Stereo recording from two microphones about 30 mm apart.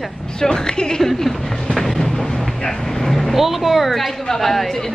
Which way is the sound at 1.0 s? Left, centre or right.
Centre.